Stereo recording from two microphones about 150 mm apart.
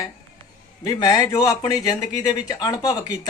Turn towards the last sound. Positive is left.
turn(degrees=25)  # may be behind; listen again after turning